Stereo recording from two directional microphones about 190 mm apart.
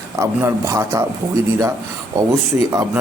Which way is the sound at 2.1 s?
15° right (ahead or behind).